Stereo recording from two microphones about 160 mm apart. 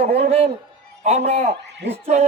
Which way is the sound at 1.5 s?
90° right.